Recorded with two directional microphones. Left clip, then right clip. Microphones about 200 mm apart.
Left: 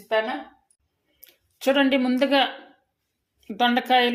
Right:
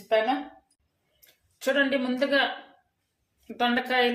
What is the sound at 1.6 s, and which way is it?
Speech, 40° left (ahead or behind).